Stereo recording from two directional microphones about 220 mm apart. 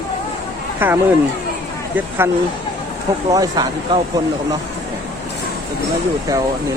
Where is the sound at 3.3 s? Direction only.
15° right (ahead or behind).